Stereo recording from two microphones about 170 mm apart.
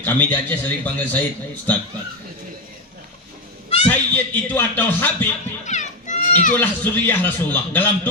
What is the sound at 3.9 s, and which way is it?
A man's voice, 10° left (ahead or behind).